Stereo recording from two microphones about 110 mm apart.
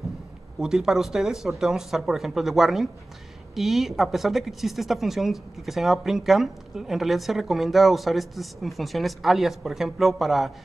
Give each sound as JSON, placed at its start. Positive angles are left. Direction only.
{"t": 0.6, "sound": "speech", "side_deg": -5}